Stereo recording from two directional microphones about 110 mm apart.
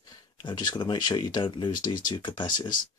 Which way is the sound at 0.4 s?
45° left (ahead or behind).